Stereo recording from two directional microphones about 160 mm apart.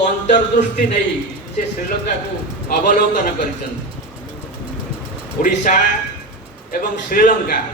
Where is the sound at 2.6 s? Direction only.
55° left (ahead or behind).